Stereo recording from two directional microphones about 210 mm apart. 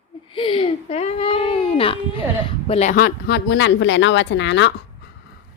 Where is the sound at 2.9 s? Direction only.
50° left (ahead or behind).